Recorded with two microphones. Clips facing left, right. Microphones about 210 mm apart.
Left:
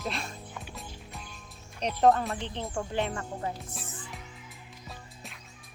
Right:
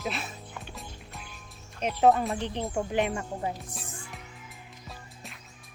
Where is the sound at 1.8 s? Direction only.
5° right (ahead or behind).